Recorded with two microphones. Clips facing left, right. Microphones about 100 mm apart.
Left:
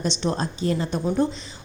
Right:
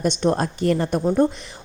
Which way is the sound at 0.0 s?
50° right (ahead or behind).